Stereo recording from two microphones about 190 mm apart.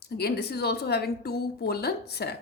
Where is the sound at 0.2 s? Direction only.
55° left (ahead or behind).